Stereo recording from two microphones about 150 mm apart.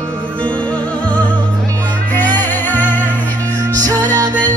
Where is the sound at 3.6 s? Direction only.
25° right (ahead or behind).